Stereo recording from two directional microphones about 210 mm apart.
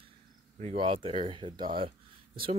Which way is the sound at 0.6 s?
30° right (ahead or behind).